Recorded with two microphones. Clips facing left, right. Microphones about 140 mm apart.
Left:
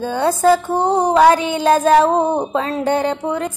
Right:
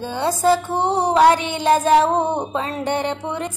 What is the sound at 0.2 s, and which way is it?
Speech, 45° left (ahead or behind).